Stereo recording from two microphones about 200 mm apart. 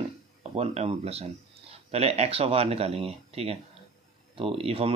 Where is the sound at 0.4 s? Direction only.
30° right (ahead or behind).